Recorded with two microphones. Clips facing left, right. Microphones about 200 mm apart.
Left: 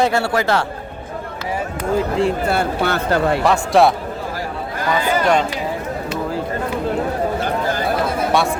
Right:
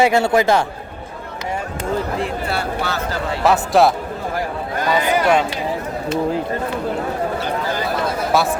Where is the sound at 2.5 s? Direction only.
55° left (ahead or behind).